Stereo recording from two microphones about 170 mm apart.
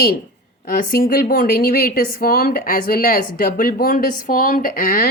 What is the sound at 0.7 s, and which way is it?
Speech, 60° left (ahead or behind).